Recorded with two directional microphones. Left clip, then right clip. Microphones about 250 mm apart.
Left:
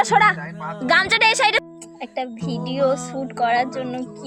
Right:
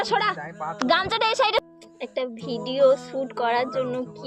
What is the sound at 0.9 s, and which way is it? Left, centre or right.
Speech, centre.